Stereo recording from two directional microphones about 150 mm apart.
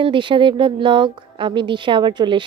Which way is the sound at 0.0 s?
35° right (ahead or behind).